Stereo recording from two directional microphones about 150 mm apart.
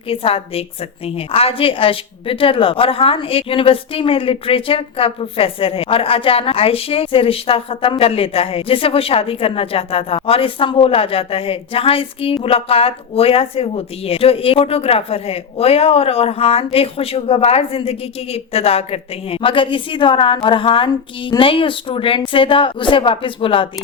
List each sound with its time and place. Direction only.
0.1 s a woman's voice: 40° left (ahead or behind)